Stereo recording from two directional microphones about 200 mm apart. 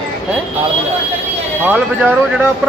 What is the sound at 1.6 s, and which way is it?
Speech, 10° right (ahead or behind).